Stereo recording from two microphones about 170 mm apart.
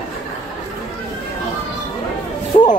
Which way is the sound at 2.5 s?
45° left (ahead or behind).